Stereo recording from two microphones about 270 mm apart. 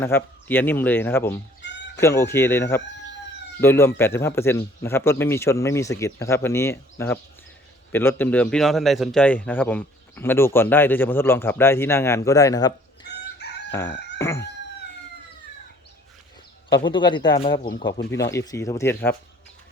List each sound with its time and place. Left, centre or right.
0.0 s a man's voice: centre
13.1 s chicken: left
14.2 s chicken: centre
16.6 s a man's voice: centre
17.6 s speech: left
18.3 s a man's voice: centre